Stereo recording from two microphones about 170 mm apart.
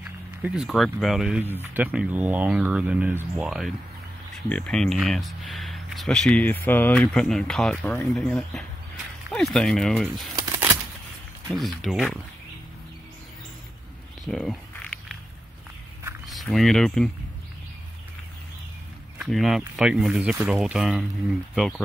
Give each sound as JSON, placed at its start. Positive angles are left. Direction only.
{"t": 0.0, "sound": "speech", "side_deg": -5}
{"t": 10.3, "sound": "a sound", "side_deg": -15}
{"t": 11.5, "sound": "speech", "side_deg": 0}
{"t": 14.2, "sound": "a sound", "side_deg": 0}
{"t": 16.3, "sound": "speech", "side_deg": 0}
{"t": 19.1, "sound": "speech", "side_deg": 0}